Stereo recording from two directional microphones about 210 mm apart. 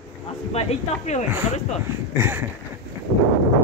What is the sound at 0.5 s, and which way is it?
Speech, 30° left (ahead or behind).